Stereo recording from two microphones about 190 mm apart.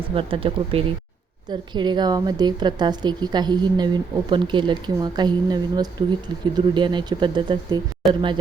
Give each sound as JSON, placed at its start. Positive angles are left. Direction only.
{"t": 0.1, "sound": "a woman's voice", "side_deg": -30}